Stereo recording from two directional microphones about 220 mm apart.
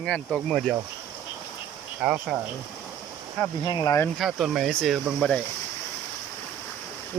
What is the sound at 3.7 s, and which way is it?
Speech, 20° left (ahead or behind).